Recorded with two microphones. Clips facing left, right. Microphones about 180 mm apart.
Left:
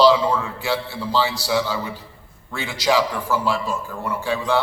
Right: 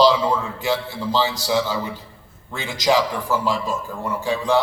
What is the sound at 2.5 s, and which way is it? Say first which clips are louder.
A man's voice: right 1 dB; 20° right (ahead or behind).